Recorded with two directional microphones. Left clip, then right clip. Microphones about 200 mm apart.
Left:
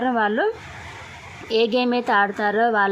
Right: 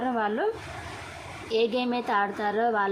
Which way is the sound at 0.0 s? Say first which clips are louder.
Left 6 dB; 20° left (ahead or behind).